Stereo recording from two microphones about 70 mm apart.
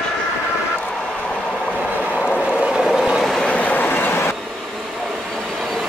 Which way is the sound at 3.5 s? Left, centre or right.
Left.